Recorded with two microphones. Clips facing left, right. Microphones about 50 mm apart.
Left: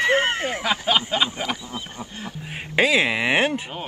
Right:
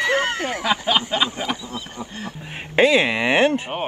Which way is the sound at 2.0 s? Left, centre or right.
Right.